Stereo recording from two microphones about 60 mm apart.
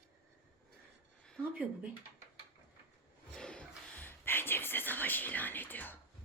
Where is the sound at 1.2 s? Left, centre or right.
Centre.